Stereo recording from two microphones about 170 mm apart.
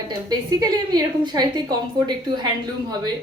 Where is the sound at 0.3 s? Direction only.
25° right (ahead or behind).